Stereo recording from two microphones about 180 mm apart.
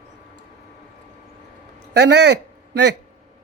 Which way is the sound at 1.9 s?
70° right (ahead or behind).